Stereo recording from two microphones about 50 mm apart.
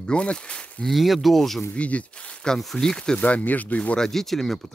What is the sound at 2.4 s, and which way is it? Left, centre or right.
Speech, centre.